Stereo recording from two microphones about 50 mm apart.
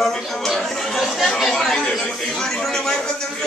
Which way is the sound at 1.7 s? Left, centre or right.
Centre.